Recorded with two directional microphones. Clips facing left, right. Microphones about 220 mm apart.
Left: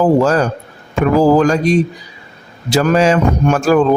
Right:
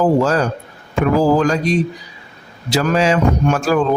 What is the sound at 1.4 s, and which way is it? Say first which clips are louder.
Speech: left 4 dB; 50° left (ahead or behind).